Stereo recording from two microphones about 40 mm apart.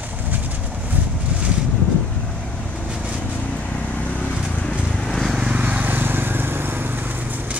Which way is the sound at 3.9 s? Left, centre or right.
Left.